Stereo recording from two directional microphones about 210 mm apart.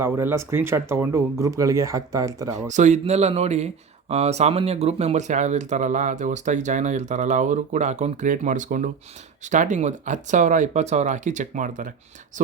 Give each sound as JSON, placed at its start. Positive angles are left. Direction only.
{"t": 0.0, "sound": "speech", "side_deg": -10}
{"t": 2.6, "sound": "speech", "side_deg": -35}